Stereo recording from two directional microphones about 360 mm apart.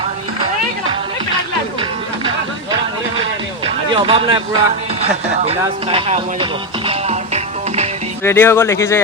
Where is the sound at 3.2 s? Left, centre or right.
Centre.